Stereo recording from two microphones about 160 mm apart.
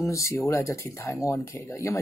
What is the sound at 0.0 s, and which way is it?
Speech, 20° left (ahead or behind).